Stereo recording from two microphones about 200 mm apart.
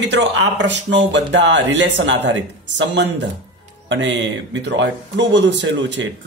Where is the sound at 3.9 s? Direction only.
65° right (ahead or behind).